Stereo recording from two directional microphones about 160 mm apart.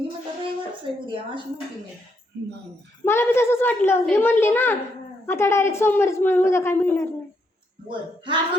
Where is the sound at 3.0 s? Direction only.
15° left (ahead or behind).